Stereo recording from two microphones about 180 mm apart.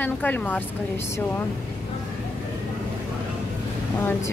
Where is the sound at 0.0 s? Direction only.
10° left (ahead or behind).